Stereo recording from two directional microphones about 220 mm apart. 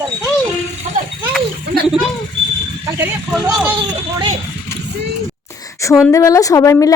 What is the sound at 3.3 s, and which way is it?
Speech, 5° right (ahead or behind).